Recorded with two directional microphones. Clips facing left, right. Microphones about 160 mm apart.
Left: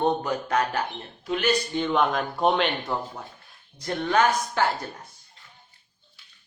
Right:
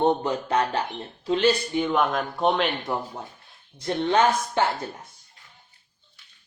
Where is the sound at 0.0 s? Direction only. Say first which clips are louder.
Right 2 dB; 25° right (ahead or behind).